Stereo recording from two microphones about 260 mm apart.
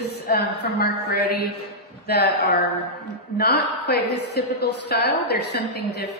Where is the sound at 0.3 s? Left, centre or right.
Left.